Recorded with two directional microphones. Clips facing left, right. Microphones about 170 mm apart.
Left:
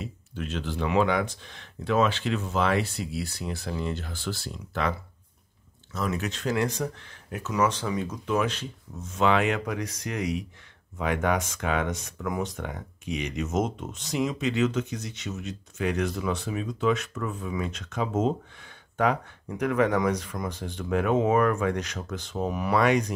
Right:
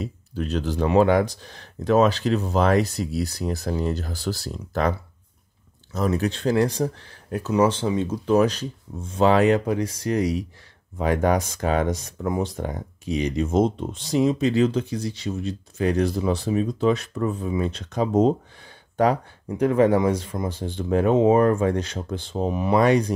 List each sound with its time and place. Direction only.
0.0 s speech: 40° right (ahead or behind)
5.9 s speech: 35° right (ahead or behind)
22.8 s speech: 35° right (ahead or behind)